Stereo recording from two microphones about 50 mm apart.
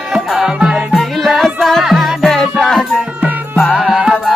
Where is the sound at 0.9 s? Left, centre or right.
Centre.